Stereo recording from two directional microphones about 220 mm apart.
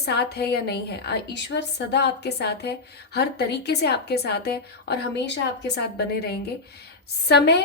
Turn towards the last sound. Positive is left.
turn(degrees=50)  # may be behind; listen again after turning